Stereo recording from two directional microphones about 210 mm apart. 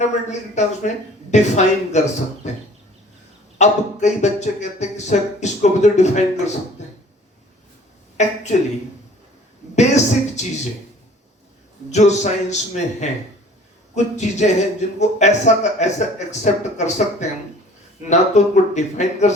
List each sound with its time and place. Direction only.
0.0 s a man's voice: 35° left (ahead or behind)
8.2 s a man's voice: 35° left (ahead or behind)
9.7 s a man's voice: 35° left (ahead or behind)
11.9 s a man's voice: 35° left (ahead or behind)